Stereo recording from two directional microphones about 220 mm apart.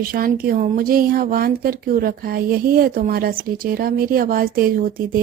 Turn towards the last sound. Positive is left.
turn(degrees=-40)  # may be behind; listen again after turning